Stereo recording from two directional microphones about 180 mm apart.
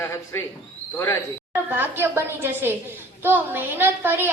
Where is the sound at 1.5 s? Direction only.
10° right (ahead or behind).